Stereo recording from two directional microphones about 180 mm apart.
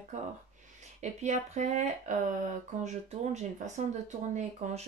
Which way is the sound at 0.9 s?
40° right (ahead or behind).